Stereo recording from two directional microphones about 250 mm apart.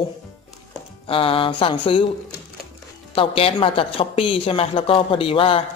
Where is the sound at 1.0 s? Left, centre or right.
Left.